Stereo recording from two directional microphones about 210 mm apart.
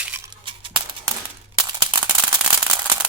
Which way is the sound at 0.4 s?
25° right (ahead or behind).